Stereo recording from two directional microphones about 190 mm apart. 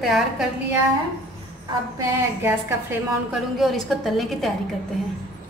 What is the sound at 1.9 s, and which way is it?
A woman's voice, 10° right (ahead or behind).